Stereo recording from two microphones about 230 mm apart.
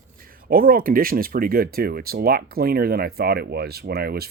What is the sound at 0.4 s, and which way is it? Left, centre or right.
Speech, right.